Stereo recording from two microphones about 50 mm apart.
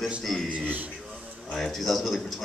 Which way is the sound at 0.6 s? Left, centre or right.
Right.